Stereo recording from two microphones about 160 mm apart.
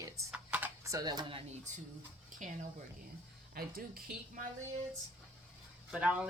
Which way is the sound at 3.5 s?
65° right (ahead or behind).